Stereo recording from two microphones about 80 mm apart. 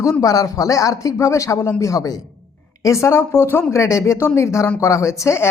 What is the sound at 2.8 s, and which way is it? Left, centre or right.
Speech, left.